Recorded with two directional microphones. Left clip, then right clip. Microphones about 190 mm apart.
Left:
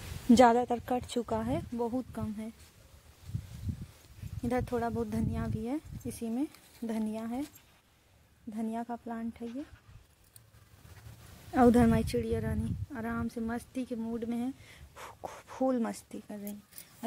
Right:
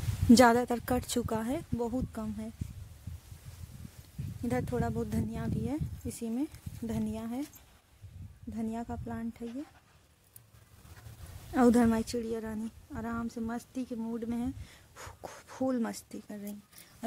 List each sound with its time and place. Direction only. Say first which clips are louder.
0.4 s speech: left 2 dB; 20° right (ahead or behind)
4.4 s a woman's voice: left 1 dB; centre (ahead or behind)
8.5 s speech: left 1 dB; 5° right (ahead or behind)
11.5 s a woman's voice: left 1 dB; centre (ahead or behind)